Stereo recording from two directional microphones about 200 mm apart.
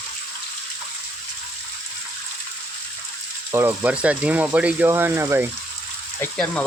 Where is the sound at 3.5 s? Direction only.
10° right (ahead or behind).